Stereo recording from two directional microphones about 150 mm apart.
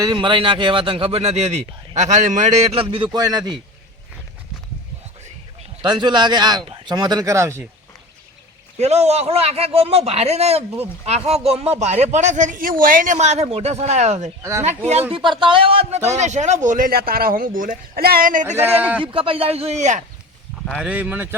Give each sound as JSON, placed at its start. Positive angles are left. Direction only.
{"t": 0.0, "sound": "a man's voice", "side_deg": -30}
{"t": 2.8, "sound": "speech", "side_deg": -35}
{"t": 5.8, "sound": "speech", "side_deg": -30}
{"t": 8.8, "sound": "a man's voice", "side_deg": -45}
{"t": 15.1, "sound": "speech", "side_deg": -35}
{"t": 18.5, "sound": "speech", "side_deg": -15}
{"t": 19.0, "sound": "speech", "side_deg": -35}
{"t": 20.7, "sound": "speech", "side_deg": -5}